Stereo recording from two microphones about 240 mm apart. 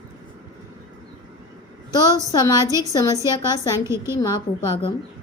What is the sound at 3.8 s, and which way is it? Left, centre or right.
Speech, centre.